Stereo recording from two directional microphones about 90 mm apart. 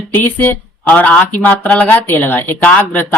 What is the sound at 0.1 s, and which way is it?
Speech, 25° left (ahead or behind).